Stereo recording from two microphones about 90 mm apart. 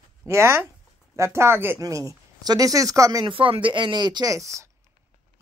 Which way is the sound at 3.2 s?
75° right (ahead or behind).